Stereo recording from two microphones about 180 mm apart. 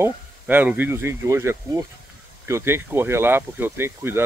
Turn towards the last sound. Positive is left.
turn(degrees=-15)  # may be behind; listen again after turning